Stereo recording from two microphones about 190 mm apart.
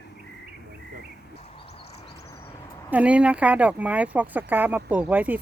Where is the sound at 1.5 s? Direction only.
30° left (ahead or behind).